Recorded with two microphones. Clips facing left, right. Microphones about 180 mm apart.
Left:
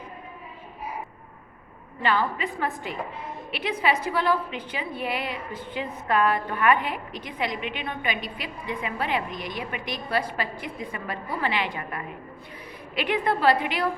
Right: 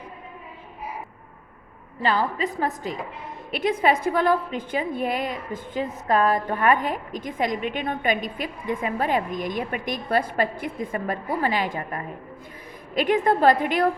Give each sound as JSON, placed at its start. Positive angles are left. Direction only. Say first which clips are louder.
{"t": 2.0, "sound": "a woman's voice", "louder": "right 2 dB", "side_deg": -35}